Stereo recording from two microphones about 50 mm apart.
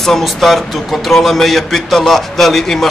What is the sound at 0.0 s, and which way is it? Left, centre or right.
A man's voice, centre.